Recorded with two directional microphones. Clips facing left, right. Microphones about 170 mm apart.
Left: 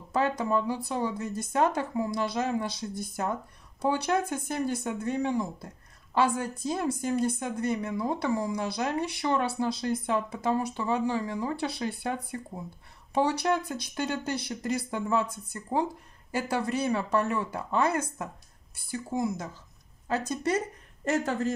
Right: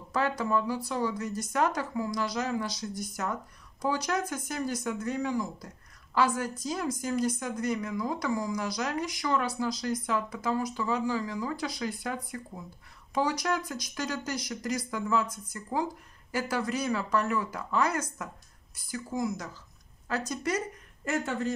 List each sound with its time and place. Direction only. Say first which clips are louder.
0.1 s a woman's voice: left 2 dB; 20° left (ahead or behind); by 21.5 s 40° left (ahead or behind)